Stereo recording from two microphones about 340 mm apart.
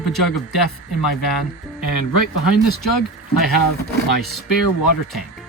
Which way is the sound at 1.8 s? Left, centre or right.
Left.